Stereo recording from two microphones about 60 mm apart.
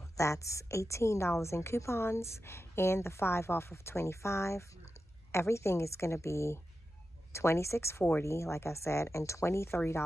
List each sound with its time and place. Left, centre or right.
0.2 s a woman's voice: left